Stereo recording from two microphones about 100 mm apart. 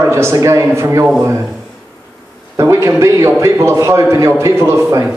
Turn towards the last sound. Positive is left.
turn(degrees=-30)  # may be behind; listen again after turning